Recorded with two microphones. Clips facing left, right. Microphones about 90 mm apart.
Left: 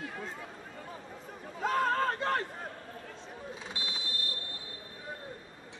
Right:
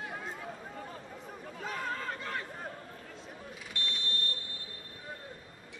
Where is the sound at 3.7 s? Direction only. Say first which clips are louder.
Right 1 dB; 10° left (ahead or behind).